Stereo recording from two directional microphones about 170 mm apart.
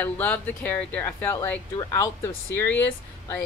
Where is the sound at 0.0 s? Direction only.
10° left (ahead or behind).